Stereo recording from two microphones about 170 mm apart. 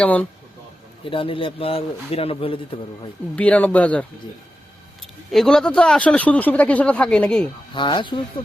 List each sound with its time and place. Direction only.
0.0 s a man's voice: 10° left (ahead or behind)
1.0 s a man's voice: 30° left (ahead or behind)
3.3 s a man's voice: 5° left (ahead or behind)
5.3 s speech: centre (ahead or behind)
7.7 s speech: 30° left (ahead or behind)